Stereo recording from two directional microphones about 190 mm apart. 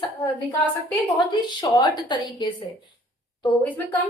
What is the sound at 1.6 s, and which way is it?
Speech, 20° left (ahead or behind).